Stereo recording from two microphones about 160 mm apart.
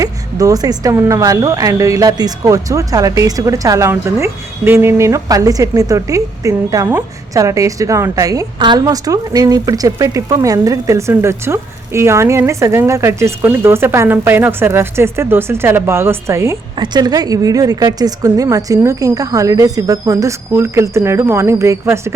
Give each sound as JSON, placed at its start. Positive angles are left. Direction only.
{"t": 0.0, "sound": "a woman's voice", "side_deg": -20}